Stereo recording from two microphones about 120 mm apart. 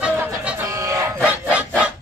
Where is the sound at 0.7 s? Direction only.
25° right (ahead or behind).